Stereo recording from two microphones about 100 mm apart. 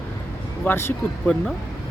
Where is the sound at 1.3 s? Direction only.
10° left (ahead or behind).